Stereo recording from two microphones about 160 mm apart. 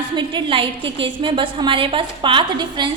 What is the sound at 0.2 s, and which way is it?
A woman's voice, 30° right (ahead or behind).